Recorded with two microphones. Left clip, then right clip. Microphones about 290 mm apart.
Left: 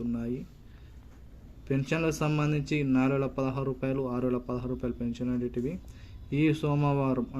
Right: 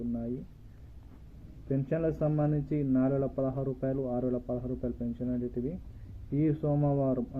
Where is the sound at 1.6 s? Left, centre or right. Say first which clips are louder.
Left 2 dB; centre.